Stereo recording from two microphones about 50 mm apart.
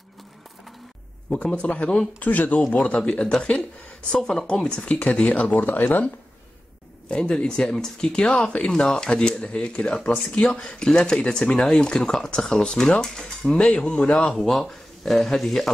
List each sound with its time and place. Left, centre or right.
1.3 s a man's voice: left
2.7 s a man's voice: left
5.6 s speech: left
7.1 s speech: centre
10.3 s a man's voice: left
10.6 s a man's voice: centre
14.4 s speech: centre